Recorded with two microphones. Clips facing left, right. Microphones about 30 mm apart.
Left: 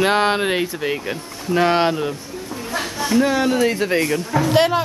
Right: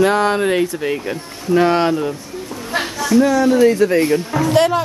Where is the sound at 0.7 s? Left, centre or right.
Centre.